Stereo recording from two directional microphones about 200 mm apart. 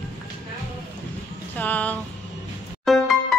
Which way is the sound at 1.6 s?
10° left (ahead or behind).